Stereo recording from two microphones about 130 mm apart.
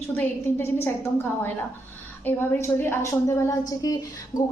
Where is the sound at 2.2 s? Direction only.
20° left (ahead or behind).